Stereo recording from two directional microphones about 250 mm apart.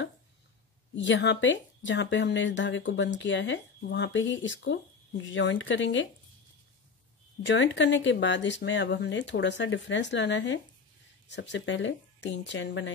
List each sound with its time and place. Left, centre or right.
0.9 s speech: left
7.4 s speech: left